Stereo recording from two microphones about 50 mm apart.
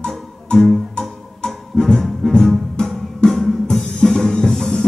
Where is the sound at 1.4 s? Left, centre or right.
Centre.